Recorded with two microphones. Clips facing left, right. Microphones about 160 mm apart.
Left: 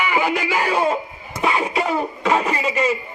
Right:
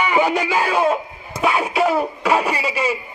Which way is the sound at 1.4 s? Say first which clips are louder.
Right 2 dB; 5° right (ahead or behind).